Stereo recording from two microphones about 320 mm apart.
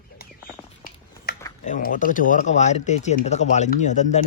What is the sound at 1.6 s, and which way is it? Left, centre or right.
Speech, left.